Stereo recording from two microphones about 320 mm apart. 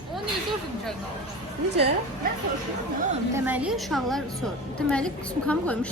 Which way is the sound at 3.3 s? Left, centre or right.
Centre.